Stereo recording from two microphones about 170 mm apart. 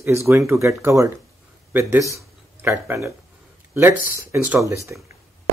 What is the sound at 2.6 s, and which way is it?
Speech, 15° right (ahead or behind).